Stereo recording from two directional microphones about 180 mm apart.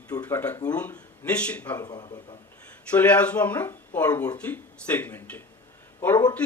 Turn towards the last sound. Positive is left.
turn(degrees=10)  # may be behind; listen again after turning